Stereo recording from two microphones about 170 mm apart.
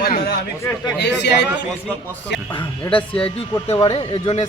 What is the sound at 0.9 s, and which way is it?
Speech, 85° left.